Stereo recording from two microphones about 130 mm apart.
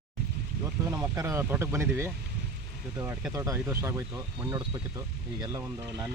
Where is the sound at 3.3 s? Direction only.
25° right (ahead or behind).